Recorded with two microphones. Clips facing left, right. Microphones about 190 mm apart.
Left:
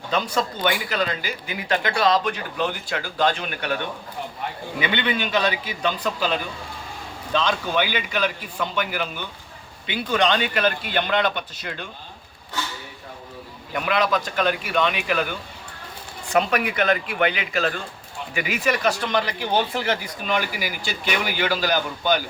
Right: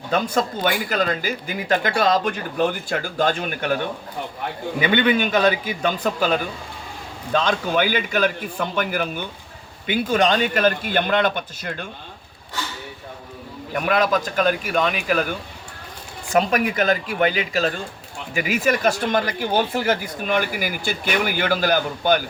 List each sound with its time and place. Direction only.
0.1 s speech: 50° right (ahead or behind)
4.8 s speech: 45° right (ahead or behind)
13.8 s speech: 45° right (ahead or behind)
16.3 s speech: 40° right (ahead or behind)